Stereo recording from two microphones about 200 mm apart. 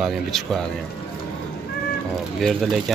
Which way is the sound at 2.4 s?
Centre (ahead or behind).